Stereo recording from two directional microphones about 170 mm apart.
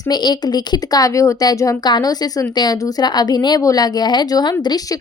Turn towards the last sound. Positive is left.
turn(degrees=20)  # may be behind; listen again after turning